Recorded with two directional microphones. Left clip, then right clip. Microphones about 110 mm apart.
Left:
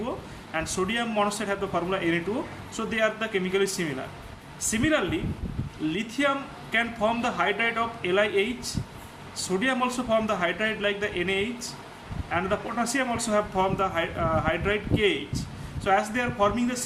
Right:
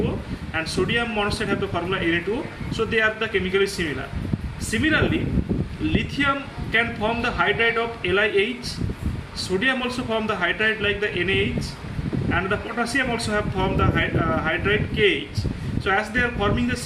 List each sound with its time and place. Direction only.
0.5 s a man's voice: 45° left (ahead or behind)
9.6 s a man's voice: 45° left (ahead or behind)
12.8 s a man's voice: 50° left (ahead or behind)